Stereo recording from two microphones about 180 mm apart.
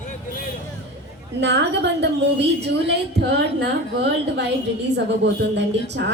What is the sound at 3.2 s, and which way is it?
A woman's voice, 70° right (ahead or behind).